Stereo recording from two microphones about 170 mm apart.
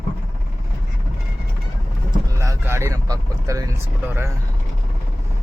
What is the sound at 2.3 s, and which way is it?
Vehicle, 15° right (ahead or behind).